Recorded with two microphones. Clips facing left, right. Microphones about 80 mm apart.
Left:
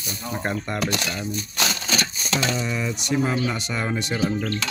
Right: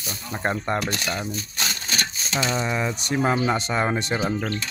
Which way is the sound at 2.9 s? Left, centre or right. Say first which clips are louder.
Right 1 dB; right.